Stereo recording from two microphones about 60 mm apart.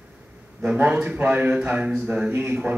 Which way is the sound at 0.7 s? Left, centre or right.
Right.